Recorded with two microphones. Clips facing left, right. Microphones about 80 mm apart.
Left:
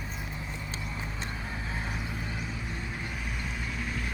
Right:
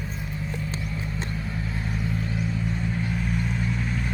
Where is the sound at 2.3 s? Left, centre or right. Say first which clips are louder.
Right 8 dB; centre.